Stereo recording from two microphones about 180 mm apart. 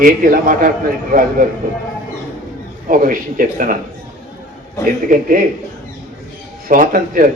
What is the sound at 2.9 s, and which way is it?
Speech, 50° right (ahead or behind).